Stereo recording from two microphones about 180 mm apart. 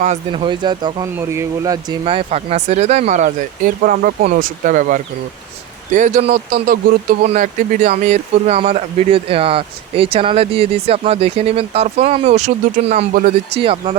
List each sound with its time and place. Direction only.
0.3 s speech: 25° right (ahead or behind)